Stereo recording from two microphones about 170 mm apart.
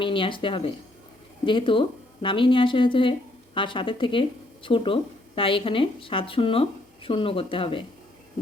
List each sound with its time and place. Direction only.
0.0 s speech: 30° left (ahead or behind)